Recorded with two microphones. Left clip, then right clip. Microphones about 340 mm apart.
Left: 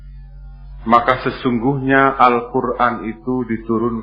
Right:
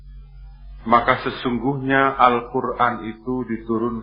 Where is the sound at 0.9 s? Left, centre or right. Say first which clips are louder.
Left 3 dB; right.